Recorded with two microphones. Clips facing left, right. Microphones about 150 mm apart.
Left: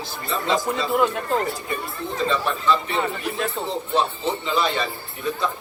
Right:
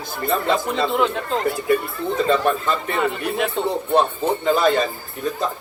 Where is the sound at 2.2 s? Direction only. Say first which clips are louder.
Right 1 dB; 50° right (ahead or behind).